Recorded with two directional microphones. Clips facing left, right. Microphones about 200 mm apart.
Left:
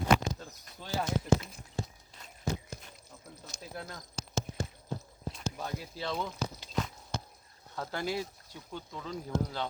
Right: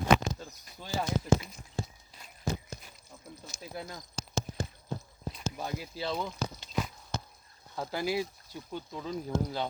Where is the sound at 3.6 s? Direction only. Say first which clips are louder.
Right 2 dB; 5° right (ahead or behind).